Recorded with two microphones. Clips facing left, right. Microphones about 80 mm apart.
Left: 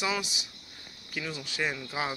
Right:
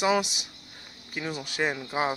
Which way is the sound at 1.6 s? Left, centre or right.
Right.